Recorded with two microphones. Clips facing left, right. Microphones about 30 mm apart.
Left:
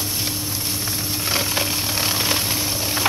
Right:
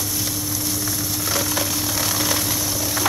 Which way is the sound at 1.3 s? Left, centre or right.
Left.